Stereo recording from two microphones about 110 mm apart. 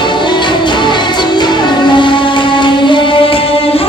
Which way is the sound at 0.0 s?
45° left (ahead or behind).